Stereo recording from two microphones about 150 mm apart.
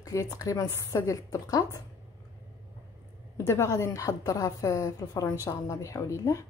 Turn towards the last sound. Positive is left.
turn(degrees=20)  # may be behind; listen again after turning